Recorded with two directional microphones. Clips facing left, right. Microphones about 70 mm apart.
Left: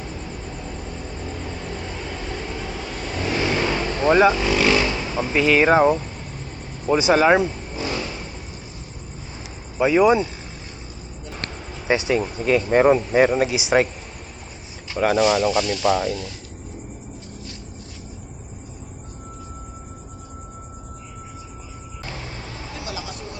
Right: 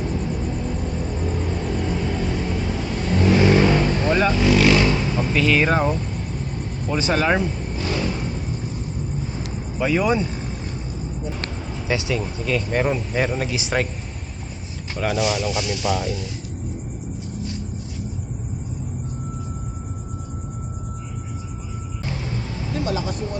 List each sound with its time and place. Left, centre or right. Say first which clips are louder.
1.3 s vehicle: right 5 dB; centre
4.0 s speech: left 9 dB; centre
4.4 s vehicle: right 3 dB; centre
5.3 s speech: left 4 dB; centre
9.7 s speech: left 4 dB; centre
11.9 s speech: left 4 dB; left
14.9 s speech: left 5 dB; centre
15.6 s speech: left 3 dB; centre
15.9 s speech: left 3 dB; centre
22.8 s vehicle: right 9 dB; right